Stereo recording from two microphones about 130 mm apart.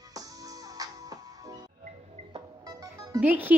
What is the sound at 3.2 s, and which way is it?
Speech, 15° right (ahead or behind).